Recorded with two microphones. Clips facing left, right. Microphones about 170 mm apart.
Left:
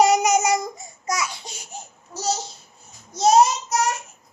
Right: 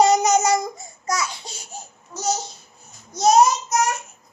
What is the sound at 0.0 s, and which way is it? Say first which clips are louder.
Child singing: right 1 dB; 10° left (ahead or behind).